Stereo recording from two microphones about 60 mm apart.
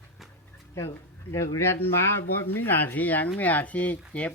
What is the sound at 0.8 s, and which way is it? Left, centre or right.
Speech, left.